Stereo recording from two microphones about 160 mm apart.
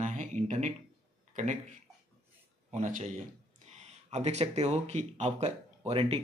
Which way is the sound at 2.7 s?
50° right (ahead or behind).